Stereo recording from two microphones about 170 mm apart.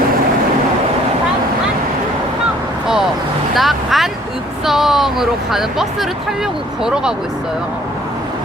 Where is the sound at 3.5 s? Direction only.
Centre (ahead or behind).